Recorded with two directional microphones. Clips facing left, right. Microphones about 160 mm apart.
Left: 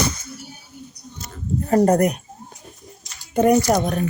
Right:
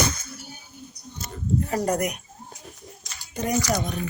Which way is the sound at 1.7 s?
50° left (ahead or behind).